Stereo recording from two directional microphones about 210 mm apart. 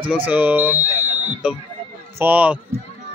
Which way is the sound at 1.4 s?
5° right (ahead or behind).